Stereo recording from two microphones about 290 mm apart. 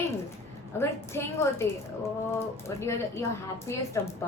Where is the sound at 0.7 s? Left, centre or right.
Centre.